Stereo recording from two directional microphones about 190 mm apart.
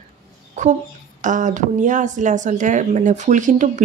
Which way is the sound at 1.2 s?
40° right (ahead or behind).